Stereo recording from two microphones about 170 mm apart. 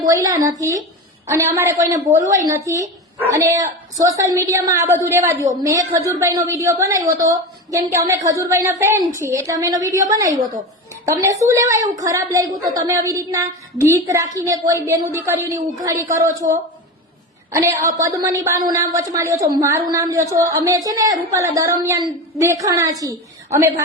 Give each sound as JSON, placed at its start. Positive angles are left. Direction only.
{"t": 0.0, "sound": "a woman's voice", "side_deg": -20}
{"t": 17.5, "sound": "a woman's voice", "side_deg": -15}